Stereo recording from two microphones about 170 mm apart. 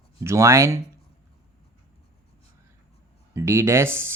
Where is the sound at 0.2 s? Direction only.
15° right (ahead or behind).